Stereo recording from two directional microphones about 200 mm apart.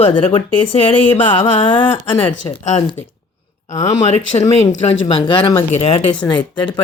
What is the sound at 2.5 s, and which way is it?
Speech, 30° left (ahead or behind).